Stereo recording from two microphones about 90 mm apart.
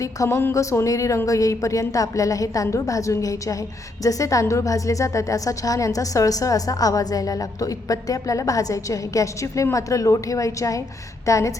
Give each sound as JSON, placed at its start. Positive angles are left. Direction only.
{"t": 0.0, "sound": "a woman's voice", "side_deg": 35}